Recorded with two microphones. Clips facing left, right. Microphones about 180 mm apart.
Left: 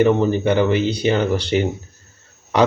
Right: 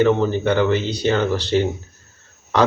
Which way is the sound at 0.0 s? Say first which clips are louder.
Left 1 dB; 15° left (ahead or behind).